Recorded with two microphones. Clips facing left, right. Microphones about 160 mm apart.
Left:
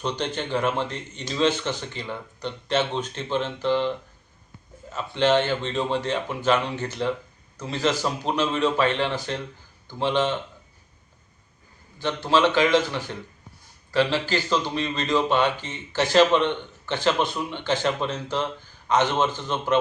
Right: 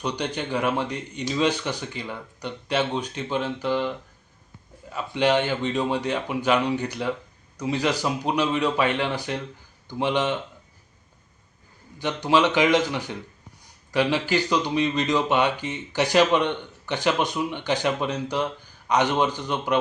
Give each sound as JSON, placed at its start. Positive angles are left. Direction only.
{"t": 0.0, "sound": "speech", "side_deg": -10}
{"t": 11.9, "sound": "speech", "side_deg": -15}